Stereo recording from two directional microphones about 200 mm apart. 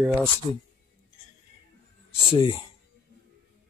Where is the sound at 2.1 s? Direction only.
25° left (ahead or behind).